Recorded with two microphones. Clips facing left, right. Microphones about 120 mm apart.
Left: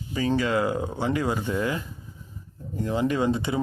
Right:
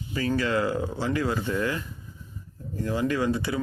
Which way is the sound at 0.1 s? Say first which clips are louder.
Left 2 dB; 20° left (ahead or behind).